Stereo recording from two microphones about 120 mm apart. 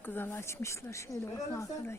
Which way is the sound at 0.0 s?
20° left (ahead or behind).